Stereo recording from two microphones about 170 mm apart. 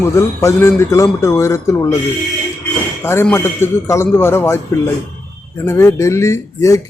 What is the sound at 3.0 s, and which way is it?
Speech, 15° left (ahead or behind).